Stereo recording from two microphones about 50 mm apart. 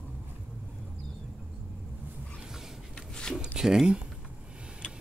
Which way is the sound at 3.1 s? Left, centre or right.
Centre.